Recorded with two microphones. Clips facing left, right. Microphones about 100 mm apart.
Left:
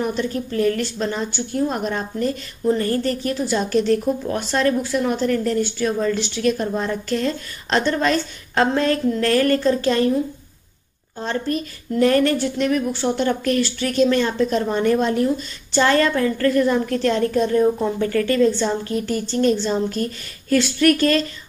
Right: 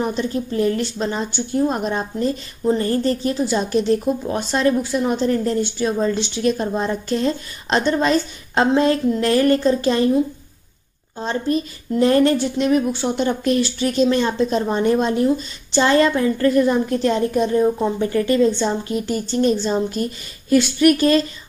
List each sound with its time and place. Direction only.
0.0 s a woman's voice: 20° right (ahead or behind)
11.1 s a woman's voice: 20° right (ahead or behind)